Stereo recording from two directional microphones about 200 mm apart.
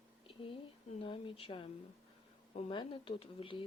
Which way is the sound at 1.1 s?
25° left (ahead or behind).